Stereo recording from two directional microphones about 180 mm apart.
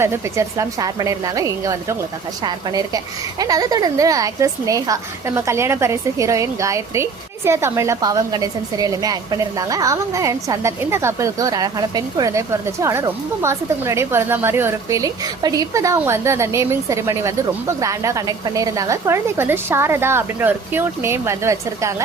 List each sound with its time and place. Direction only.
0.0 s a woman's voice: 15° right (ahead or behind)